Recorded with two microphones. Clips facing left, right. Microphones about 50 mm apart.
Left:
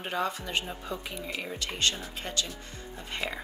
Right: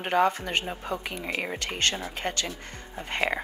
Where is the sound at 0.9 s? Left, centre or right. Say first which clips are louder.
Right 4 dB; right.